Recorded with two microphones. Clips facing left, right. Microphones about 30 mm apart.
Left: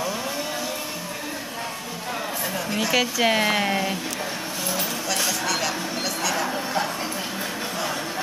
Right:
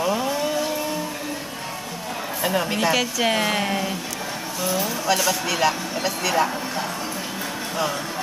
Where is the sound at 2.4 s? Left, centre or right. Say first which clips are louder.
Right 5 dB; right.